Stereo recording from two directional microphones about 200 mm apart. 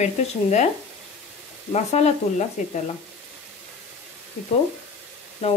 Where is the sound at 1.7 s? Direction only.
30° left (ahead or behind).